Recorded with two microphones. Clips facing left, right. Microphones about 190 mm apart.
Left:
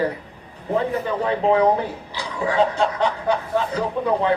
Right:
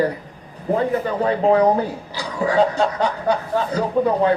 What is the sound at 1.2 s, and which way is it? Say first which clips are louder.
A man's voice: right 2 dB; 40° right (ahead or behind).